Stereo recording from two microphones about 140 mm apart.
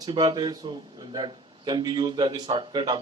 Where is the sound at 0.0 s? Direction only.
30° right (ahead or behind).